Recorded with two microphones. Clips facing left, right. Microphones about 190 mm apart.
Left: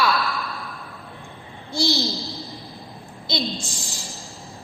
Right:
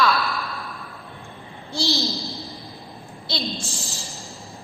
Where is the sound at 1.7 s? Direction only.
15° left (ahead or behind).